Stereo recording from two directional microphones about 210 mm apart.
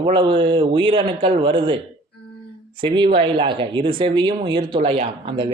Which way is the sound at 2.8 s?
25° right (ahead or behind).